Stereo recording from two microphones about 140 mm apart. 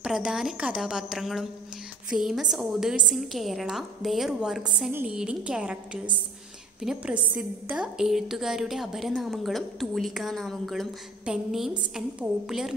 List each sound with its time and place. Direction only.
0.0 s a woman's voice: 5° right (ahead or behind)
6.8 s a woman's voice: 5° right (ahead or behind)